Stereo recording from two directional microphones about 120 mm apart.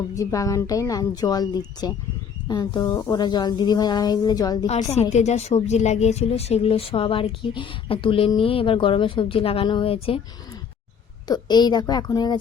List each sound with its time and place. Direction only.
0.1 s a woman's voice: 25° left (ahead or behind)
4.6 s a woman's voice: 65° left (ahead or behind)
11.3 s speech: 35° left (ahead or behind)